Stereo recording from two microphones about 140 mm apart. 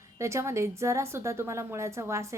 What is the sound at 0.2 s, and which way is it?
A woman's voice, 20° right (ahead or behind).